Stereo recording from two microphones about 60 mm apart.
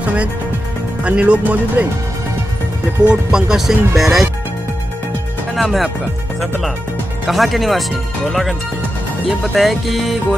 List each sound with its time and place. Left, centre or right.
0.0 s speech: right
3.1 s speech: centre
5.5 s speech: centre
7.2 s music: centre